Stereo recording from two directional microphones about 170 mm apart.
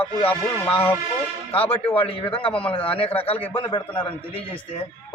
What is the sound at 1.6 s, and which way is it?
A man's voice, 35° left (ahead or behind).